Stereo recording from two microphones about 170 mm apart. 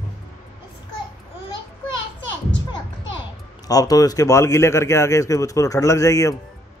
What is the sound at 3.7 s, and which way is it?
A man's voice, 20° left (ahead or behind).